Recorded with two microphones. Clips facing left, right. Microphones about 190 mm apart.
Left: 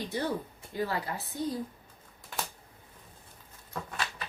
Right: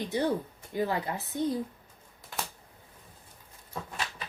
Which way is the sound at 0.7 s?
20° right (ahead or behind).